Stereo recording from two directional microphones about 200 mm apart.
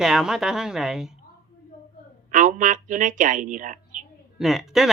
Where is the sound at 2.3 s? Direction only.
40° right (ahead or behind).